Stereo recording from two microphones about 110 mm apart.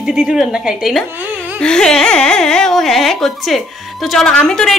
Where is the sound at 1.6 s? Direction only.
5° left (ahead or behind).